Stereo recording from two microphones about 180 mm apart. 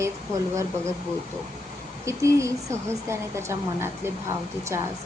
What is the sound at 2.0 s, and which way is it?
A woman's voice, 15° right (ahead or behind).